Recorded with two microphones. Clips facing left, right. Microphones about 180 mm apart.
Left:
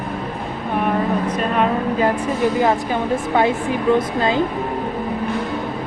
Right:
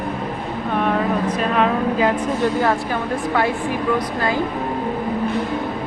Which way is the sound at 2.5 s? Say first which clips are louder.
Left 2 dB; 20° left (ahead or behind).